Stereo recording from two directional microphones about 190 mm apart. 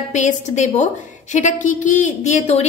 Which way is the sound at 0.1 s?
40° left (ahead or behind).